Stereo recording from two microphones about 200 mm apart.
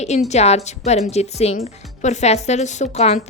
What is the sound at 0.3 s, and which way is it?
Speech, 35° left (ahead or behind).